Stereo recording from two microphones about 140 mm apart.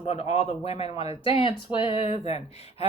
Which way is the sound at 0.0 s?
50° left (ahead or behind).